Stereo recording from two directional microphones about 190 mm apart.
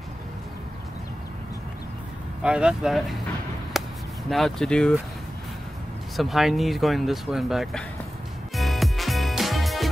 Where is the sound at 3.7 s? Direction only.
Centre (ahead or behind).